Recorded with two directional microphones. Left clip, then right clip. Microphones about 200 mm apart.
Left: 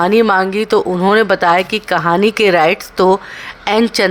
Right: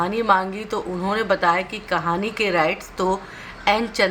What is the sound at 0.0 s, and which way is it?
Speech, 50° left (ahead or behind).